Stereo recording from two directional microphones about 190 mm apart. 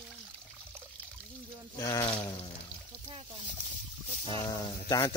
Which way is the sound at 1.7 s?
15° left (ahead or behind).